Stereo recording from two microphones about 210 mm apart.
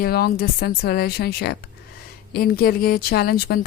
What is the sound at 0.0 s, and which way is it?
A woman's voice, 45° left (ahead or behind).